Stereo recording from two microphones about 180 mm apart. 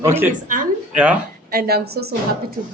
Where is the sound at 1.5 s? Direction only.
60° right (ahead or behind).